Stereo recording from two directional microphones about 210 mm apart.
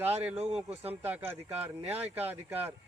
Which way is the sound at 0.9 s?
10° right (ahead or behind).